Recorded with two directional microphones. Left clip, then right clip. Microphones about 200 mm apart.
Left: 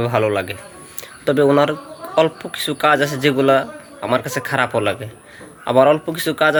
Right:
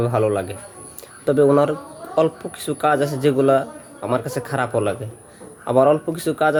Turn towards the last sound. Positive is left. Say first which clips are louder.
# left 2 dB
turn(degrees=-5)  # may be behind; listen again after turning